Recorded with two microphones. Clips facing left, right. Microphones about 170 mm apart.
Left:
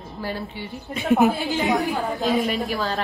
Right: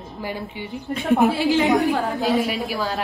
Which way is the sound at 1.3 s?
90° right.